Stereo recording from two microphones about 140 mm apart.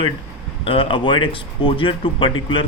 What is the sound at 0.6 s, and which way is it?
Speech, 40° left (ahead or behind).